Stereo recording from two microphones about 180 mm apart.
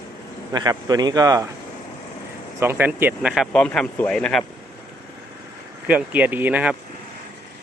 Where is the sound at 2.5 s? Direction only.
10° right (ahead or behind); by 4.4 s 5° left (ahead or behind).